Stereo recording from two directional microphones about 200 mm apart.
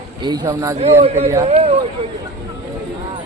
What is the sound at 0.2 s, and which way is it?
Speech, 20° right (ahead or behind).